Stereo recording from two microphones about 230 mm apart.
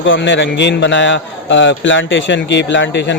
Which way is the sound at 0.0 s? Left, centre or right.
Left.